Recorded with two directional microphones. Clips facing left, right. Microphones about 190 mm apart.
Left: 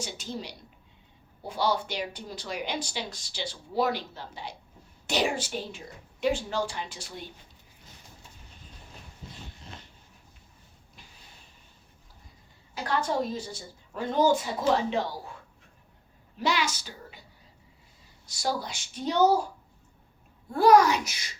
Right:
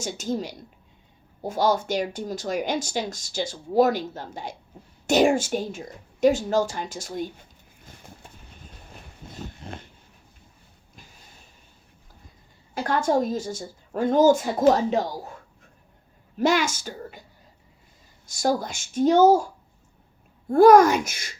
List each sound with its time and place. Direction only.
0.0 s speech: 45° right (ahead or behind)
7.9 s a sound: 55° right (ahead or behind)
8.6 s train: 45° right (ahead or behind)
9.3 s dog: 45° right (ahead or behind)
12.7 s speech: 45° right (ahead or behind)
16.4 s speech: 45° right (ahead or behind)
18.3 s speech: 45° right (ahead or behind)
20.5 s speech: 50° right (ahead or behind)